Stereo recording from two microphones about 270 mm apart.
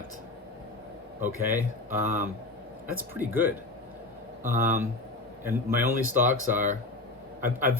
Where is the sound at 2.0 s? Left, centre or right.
Right.